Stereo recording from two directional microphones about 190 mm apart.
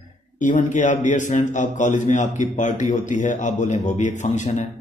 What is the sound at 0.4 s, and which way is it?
A man's voice, 40° left (ahead or behind).